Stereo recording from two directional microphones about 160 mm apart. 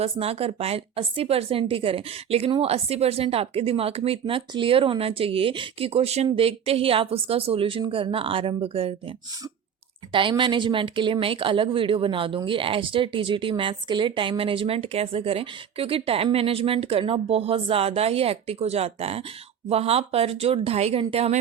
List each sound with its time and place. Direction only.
0.0 s speech: 35° right (ahead or behind)
10.1 s speech: 30° right (ahead or behind)